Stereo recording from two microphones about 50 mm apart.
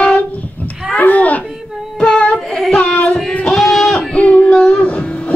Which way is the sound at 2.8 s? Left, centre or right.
Left.